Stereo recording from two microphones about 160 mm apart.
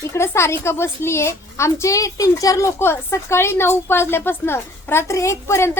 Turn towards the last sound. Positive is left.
turn(degrees=15)  # may be behind; listen again after turning